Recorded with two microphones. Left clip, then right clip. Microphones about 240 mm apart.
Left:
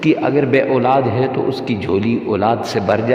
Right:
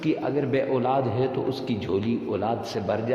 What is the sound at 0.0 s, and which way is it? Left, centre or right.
A man's voice, left.